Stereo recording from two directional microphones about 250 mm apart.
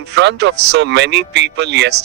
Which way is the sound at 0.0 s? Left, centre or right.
Right.